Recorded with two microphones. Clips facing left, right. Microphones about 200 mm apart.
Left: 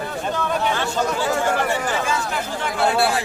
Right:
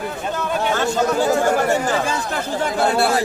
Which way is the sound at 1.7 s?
40° right (ahead or behind).